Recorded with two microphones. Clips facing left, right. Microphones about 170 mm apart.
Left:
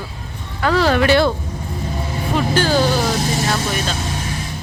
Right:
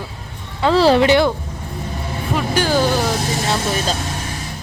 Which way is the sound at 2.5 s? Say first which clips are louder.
Even; 15° right (ahead or behind).